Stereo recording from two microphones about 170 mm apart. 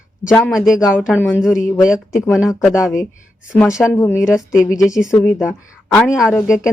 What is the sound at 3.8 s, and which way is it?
Speech, 15° left (ahead or behind).